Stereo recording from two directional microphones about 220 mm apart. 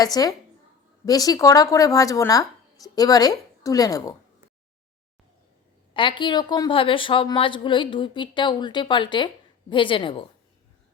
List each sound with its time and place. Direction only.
0.0 s speech: 15° left (ahead or behind)
5.9 s a woman's voice: 20° left (ahead or behind)